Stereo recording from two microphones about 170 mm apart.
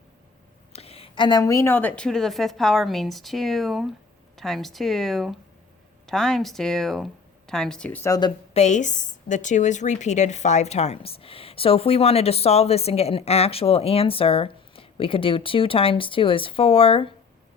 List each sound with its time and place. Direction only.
0.7 s speech: 35° left (ahead or behind); by 8.1 s 10° left (ahead or behind)
8.5 s a woman's voice: 45° left (ahead or behind)